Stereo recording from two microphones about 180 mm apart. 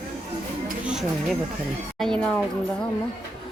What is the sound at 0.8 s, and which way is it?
Speech, 5° right (ahead or behind).